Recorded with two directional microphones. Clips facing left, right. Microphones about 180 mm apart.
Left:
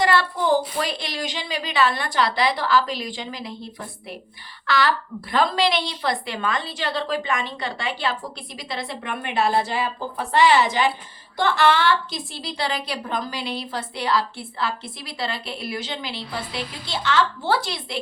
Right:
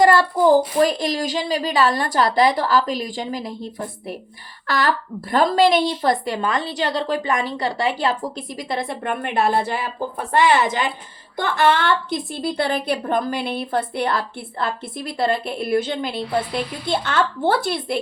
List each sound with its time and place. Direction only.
0.0 s a woman's voice: 45° right (ahead or behind)